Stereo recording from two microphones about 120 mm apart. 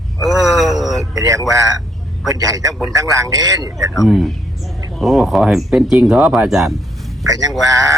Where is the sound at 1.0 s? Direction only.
25° right (ahead or behind).